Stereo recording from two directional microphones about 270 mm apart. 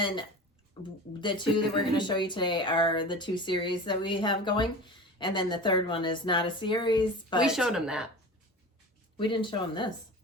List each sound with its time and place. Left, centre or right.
0.8 s speech: centre
7.4 s speech: centre
9.1 s speech: centre